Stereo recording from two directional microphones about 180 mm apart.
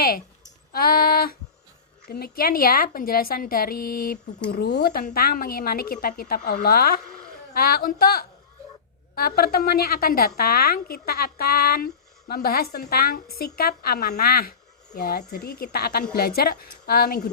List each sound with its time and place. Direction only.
0.7 s a woman's voice: 55° left (ahead or behind)